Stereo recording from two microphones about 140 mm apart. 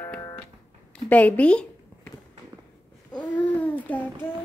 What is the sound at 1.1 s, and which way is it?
Speech, 10° left (ahead or behind).